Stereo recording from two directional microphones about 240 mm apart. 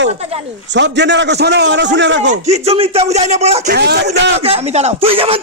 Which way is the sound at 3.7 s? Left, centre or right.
Right.